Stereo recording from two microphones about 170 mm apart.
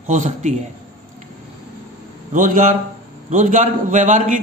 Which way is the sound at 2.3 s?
50° right (ahead or behind).